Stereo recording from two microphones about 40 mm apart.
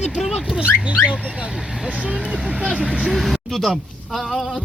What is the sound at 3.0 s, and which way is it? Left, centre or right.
A man's voice, centre.